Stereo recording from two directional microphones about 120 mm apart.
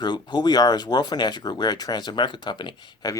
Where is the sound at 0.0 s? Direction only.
35° left (ahead or behind).